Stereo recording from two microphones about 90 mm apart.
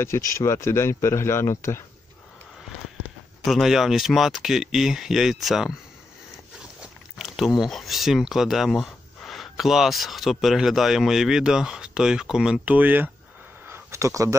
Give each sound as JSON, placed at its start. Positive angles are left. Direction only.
{"t": 0.0, "sound": "speech", "side_deg": 30}
{"t": 3.4, "sound": "speech", "side_deg": 0}
{"t": 7.2, "sound": "a sound", "side_deg": 0}
{"t": 7.6, "sound": "speech", "side_deg": 0}
{"t": 12.6, "sound": "speech", "side_deg": -20}
{"t": 13.7, "sound": "a sound", "side_deg": -30}